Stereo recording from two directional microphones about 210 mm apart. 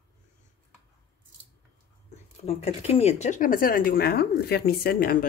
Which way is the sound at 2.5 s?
30° left (ahead or behind).